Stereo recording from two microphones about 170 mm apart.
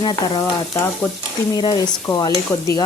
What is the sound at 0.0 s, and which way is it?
Speech, 25° left (ahead or behind).